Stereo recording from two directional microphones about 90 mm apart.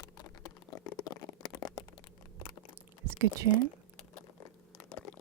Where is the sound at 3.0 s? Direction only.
30° right (ahead or behind).